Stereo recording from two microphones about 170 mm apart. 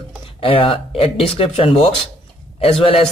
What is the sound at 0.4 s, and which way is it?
Speech, 35° left (ahead or behind).